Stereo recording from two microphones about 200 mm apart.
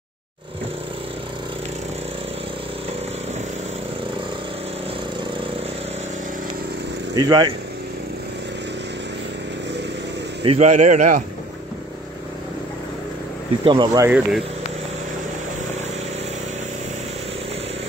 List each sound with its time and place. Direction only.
7.2 s speech: 20° right (ahead or behind)
10.4 s a man's voice: 30° right (ahead or behind)
13.7 s speech: 20° right (ahead or behind)